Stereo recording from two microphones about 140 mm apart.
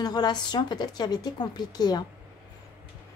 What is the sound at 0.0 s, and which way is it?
A woman's voice, 30° left (ahead or behind).